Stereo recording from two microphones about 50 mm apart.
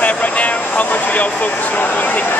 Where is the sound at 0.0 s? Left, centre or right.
Left.